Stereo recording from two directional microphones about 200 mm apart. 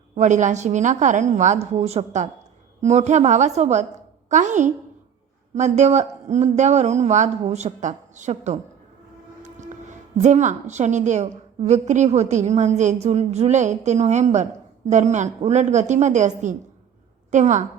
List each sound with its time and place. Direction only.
0.2 s a woman's voice: 35° right (ahead or behind)
9.4 s train: 35° right (ahead or behind)
10.2 s a woman's voice: 35° right (ahead or behind)